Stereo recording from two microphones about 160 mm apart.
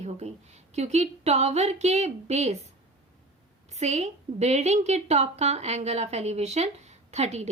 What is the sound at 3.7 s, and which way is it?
A woman's voice, 45° right (ahead or behind).